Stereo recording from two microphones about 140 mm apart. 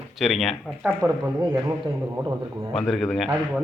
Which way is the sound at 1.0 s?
20° right (ahead or behind).